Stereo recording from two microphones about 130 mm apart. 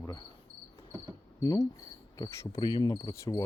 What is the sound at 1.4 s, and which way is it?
Speech, 30° left (ahead or behind).